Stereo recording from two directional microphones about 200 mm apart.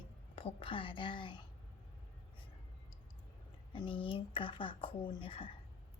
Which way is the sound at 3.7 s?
25° left (ahead or behind).